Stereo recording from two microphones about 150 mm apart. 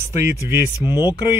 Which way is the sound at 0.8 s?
30° left (ahead or behind).